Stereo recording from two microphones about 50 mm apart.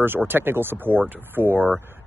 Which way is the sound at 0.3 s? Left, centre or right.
Right.